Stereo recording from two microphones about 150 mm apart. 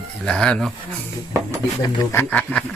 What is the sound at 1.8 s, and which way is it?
Speech, 25° left (ahead or behind).